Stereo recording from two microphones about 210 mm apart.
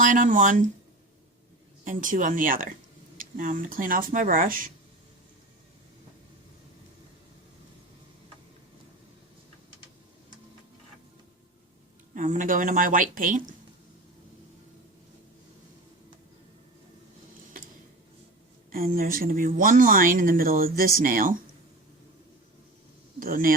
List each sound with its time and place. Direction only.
0.0 s speech: 40° right (ahead or behind)
1.8 s speech: 40° right (ahead or behind)
12.1 s speech: 35° right (ahead or behind)
18.7 s speech: 45° right (ahead or behind)
23.2 s speech: 45° right (ahead or behind)